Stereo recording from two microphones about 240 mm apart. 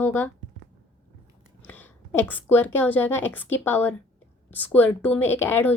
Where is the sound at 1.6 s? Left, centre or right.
Centre.